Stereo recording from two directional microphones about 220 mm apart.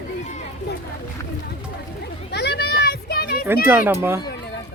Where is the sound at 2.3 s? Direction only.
50° left (ahead or behind).